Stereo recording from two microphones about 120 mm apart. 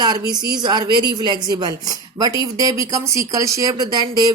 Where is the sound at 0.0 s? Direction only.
35° right (ahead or behind).